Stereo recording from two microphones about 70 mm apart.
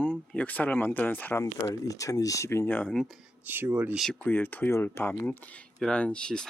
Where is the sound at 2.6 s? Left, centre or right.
Left.